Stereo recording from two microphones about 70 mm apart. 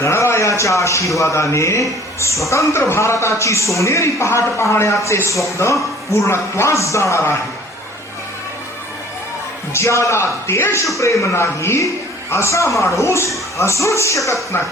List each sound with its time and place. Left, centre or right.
0.0 s a man's voice: left
9.7 s a man's voice: left